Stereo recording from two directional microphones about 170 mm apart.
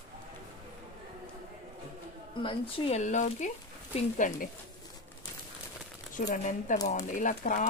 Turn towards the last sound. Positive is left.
turn(degrees=50)  # may be behind; listen again after turning